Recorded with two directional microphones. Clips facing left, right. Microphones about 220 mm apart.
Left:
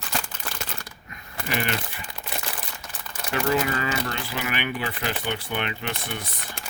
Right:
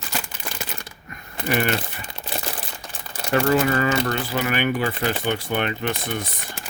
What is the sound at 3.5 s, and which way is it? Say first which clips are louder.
Speech: right 6 dB; 50° right (ahead or behind).